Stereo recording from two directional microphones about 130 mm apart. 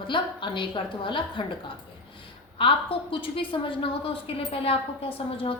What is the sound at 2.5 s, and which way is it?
A woman's voice, 40° left (ahead or behind).